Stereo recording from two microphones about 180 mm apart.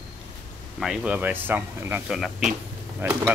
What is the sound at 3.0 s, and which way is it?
Speech, 10° right (ahead or behind).